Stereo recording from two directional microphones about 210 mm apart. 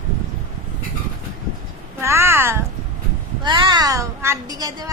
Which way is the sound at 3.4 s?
20° right (ahead or behind).